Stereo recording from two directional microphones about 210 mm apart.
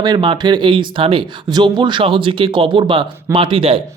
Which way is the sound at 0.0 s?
20° right (ahead or behind).